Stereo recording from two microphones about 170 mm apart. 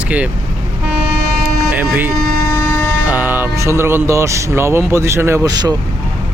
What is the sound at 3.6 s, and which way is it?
Speech, 15° right (ahead or behind).